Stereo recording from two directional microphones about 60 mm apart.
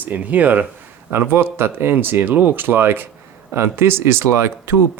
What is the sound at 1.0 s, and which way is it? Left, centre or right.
Speech, right.